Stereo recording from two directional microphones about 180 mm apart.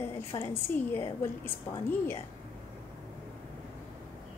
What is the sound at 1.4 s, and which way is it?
Speech, 15° left (ahead or behind).